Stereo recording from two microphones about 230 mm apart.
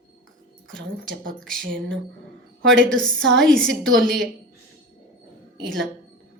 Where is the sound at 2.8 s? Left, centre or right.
Centre.